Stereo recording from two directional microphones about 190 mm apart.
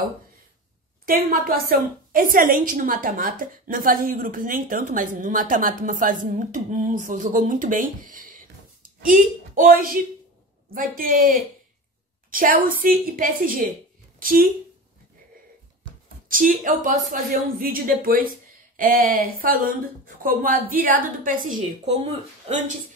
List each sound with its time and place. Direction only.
1.0 s a woman's voice: 50° right (ahead or behind)
16.3 s a woman's voice: 45° right (ahead or behind)